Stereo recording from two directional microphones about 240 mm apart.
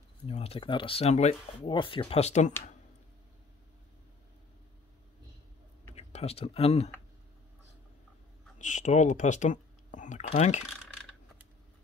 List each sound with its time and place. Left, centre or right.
0.3 s speech: left
5.9 s speech: left
8.5 s speech: left